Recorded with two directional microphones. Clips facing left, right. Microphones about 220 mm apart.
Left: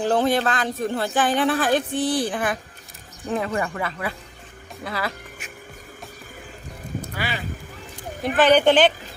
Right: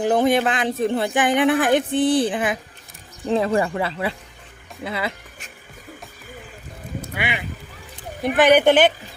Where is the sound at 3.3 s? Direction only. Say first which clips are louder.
Right 5 dB; 30° right (ahead or behind).